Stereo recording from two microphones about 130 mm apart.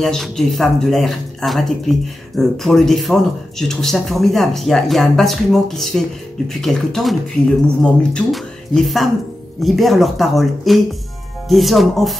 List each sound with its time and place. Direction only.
0.0 s speech: centre (ahead or behind)